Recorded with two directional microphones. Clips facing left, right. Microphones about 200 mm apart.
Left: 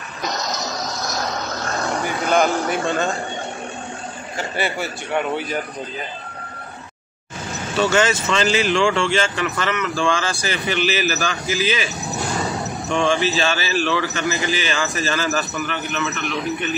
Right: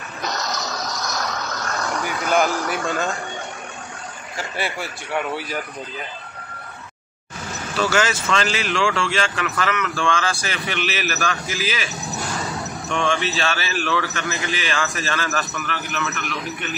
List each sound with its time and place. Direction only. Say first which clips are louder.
0.3 s music: left 1 dB; 15° left (ahead or behind)
1.2 s a sound: left 2 dB; 20° left (ahead or behind)
2.2 s speech: left 2 dB; centre (ahead or behind)
2.5 s a man's voice: left 3 dB; 20° left (ahead or behind)
4.4 s speech: left 3 dB; centre (ahead or behind)
7.9 s speech: left 1 dB; centre (ahead or behind)